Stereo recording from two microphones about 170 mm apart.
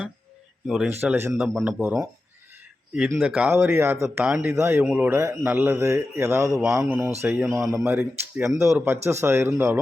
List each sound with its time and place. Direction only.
0.9 s speech: 10° right (ahead or behind)
3.2 s speech: 5° right (ahead or behind)